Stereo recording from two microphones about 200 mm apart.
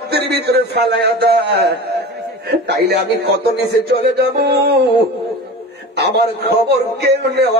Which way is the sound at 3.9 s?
55° right (ahead or behind).